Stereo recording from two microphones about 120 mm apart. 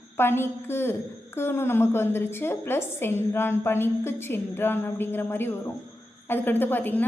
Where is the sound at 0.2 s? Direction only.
20° left (ahead or behind).